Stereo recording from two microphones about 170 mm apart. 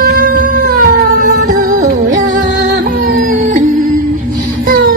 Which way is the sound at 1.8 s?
45° right (ahead or behind).